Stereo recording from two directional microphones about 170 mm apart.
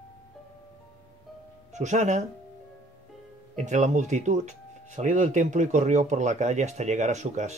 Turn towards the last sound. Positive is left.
turn(degrees=-45)  # may be behind; listen again after turning